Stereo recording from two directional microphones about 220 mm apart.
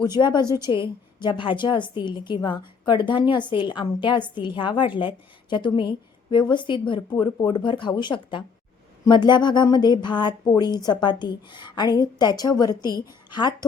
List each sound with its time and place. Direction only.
0.0 s a woman's voice: 20° left (ahead or behind)